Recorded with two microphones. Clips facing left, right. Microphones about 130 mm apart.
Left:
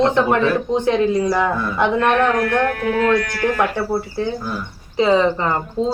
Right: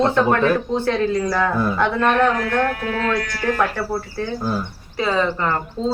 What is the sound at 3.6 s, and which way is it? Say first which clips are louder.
Speech: left 2 dB; 20° left (ahead or behind).